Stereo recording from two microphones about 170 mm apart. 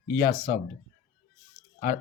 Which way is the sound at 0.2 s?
60° left (ahead or behind).